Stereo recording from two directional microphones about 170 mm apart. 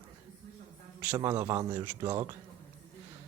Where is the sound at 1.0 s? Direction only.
15° right (ahead or behind).